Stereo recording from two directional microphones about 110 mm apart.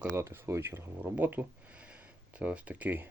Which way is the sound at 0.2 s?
25° right (ahead or behind).